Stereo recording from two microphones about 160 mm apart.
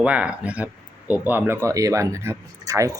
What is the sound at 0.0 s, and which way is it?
Speech, 10° right (ahead or behind).